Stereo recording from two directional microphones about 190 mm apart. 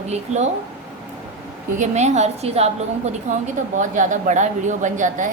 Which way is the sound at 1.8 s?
35° right (ahead or behind).